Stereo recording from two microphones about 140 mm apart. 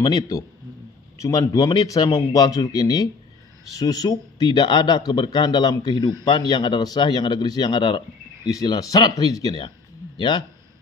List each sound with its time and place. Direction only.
0.0 s a man's voice: 20° left (ahead or behind)